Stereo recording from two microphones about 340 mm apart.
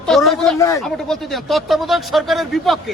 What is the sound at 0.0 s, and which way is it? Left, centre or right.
Speech, centre.